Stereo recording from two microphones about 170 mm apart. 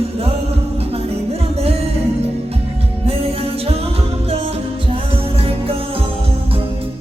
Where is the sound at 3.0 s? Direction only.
35° right (ahead or behind).